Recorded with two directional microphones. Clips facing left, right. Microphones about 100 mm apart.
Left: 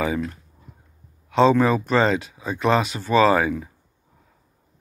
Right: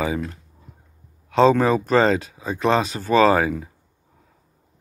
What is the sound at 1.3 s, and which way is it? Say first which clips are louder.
Speech: right 1 dB; 35° right (ahead or behind).